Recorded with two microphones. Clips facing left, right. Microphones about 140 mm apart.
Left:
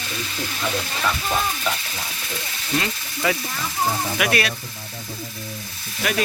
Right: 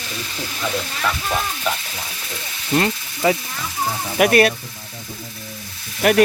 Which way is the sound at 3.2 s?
25° right (ahead or behind).